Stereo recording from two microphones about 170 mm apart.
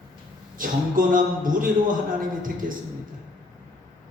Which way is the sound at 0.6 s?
55° right (ahead or behind).